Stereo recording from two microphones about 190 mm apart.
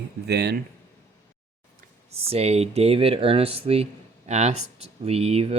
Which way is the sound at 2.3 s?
35° right (ahead or behind).